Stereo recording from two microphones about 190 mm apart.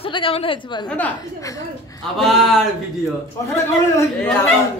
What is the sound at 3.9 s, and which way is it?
Speech, 10° left (ahead or behind).